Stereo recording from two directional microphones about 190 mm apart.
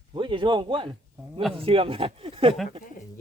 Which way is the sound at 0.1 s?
25° right (ahead or behind).